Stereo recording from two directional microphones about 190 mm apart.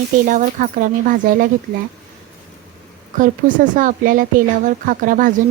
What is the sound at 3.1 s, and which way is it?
Speech, 45° right (ahead or behind).